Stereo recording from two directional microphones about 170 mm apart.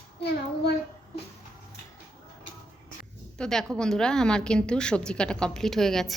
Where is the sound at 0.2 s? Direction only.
80° left.